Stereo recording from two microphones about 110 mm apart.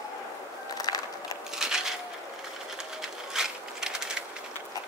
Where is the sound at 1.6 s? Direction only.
5° right (ahead or behind).